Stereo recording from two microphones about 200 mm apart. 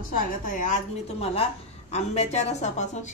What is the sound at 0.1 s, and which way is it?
A woman's voice, 45° left (ahead or behind).